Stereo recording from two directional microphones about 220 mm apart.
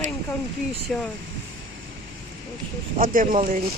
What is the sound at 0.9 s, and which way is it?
Speech, centre (ahead or behind).